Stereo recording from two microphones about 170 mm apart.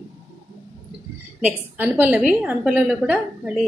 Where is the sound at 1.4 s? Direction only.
10° right (ahead or behind).